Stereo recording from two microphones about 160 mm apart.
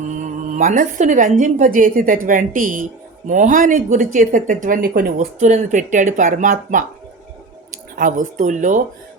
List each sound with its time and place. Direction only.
0.1 s a woman's voice: 50° right (ahead or behind); by 5.1 s 70° right (ahead or behind)
5.1 s a woman's voice: 50° right (ahead or behind)
7.9 s a woman's voice: 55° right (ahead or behind)